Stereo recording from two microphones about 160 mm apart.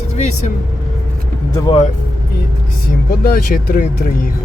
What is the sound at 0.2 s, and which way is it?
Speech, 45° left (ahead or behind).